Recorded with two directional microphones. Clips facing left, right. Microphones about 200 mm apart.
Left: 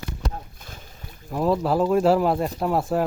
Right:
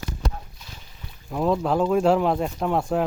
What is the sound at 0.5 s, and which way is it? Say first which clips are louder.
Boat: left 3 dB; 50° left (ahead or behind).